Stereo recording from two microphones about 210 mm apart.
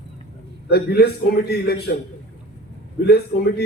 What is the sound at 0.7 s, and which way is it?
Speech, 50° left (ahead or behind).